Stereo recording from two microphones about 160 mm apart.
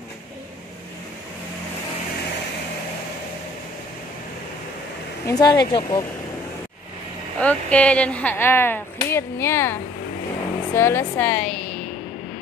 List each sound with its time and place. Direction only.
5.2 s speech: 25° left (ahead or behind)
7.3 s speech: 5° left (ahead or behind)